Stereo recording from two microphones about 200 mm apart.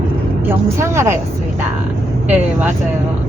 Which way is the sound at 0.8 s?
15° right (ahead or behind).